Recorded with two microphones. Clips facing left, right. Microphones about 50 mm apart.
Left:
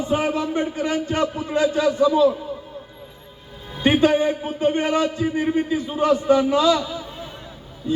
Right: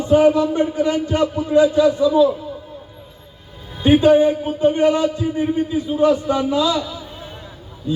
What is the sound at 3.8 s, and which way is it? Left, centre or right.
A man's voice, left.